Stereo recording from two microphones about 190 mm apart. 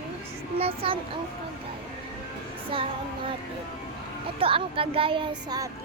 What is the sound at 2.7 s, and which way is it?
Speech, 25° right (ahead or behind).